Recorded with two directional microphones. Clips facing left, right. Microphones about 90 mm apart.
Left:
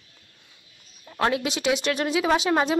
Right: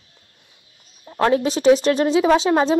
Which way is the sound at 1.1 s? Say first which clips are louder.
Right 6 dB; 35° right (ahead or behind).